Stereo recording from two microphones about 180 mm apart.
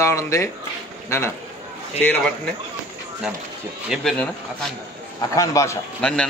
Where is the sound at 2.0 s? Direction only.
10° left (ahead or behind).